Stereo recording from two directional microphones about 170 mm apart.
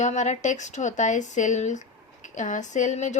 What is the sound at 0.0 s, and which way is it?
Speech, 45° left (ahead or behind).